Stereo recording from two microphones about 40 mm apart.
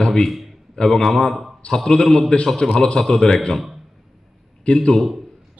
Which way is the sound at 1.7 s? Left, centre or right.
Centre.